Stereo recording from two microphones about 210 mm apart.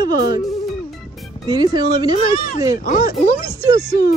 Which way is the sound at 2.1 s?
30° left (ahead or behind).